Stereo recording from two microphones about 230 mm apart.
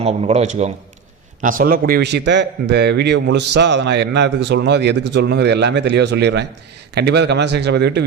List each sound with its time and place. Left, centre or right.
0.0 s a man's voice: right